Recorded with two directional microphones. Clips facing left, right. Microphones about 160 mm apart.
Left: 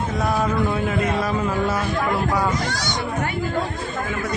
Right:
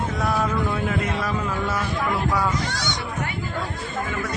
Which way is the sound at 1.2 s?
25° left (ahead or behind).